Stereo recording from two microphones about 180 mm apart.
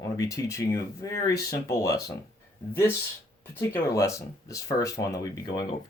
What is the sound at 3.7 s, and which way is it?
Speech, 15° left (ahead or behind).